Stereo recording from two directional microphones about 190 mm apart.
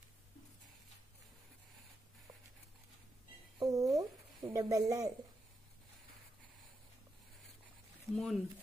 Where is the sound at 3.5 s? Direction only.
20° right (ahead or behind).